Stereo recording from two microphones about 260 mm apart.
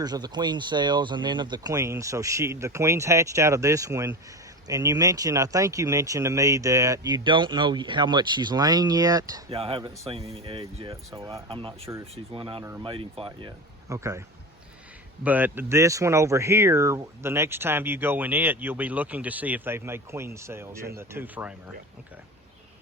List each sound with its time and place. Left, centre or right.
0.0 s speech: centre
15.2 s speech: centre